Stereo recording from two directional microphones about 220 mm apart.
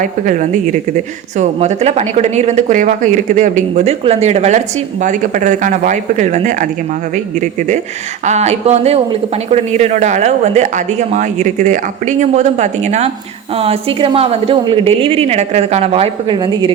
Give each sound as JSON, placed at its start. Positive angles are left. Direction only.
{"t": 0.0, "sound": "speech", "side_deg": -35}
{"t": 8.3, "sound": "a woman's voice", "side_deg": -30}